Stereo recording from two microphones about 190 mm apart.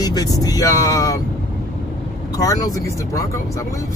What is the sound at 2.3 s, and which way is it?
Speech, 20° left (ahead or behind).